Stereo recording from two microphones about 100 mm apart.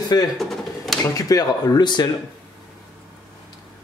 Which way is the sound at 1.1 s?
35° left (ahead or behind).